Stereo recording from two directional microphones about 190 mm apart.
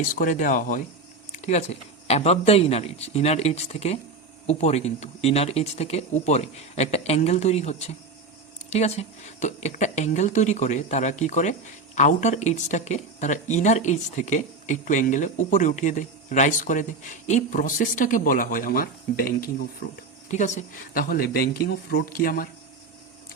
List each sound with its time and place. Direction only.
0.2 s speech: 45° left (ahead or behind)
1.3 s a sound: 35° left (ahead or behind)
2.0 s speech: 35° left (ahead or behind); by 19.5 s 50° left (ahead or behind)
20.2 s speech: 40° left (ahead or behind)